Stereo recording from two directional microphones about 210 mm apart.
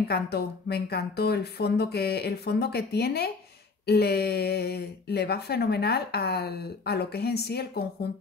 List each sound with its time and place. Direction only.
0.1 s speech: 50° left (ahead or behind)